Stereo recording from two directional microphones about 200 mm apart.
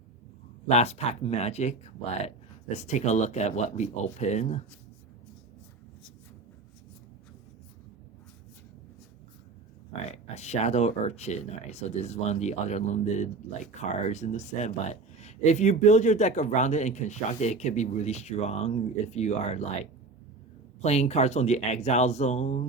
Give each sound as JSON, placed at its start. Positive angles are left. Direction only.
{"t": 0.7, "sound": "speech", "side_deg": 30}
{"t": 10.1, "sound": "speech", "side_deg": 35}
{"t": 20.8, "sound": "speech", "side_deg": 35}